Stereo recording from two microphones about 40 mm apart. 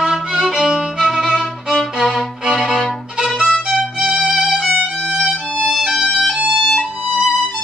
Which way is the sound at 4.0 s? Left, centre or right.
Right.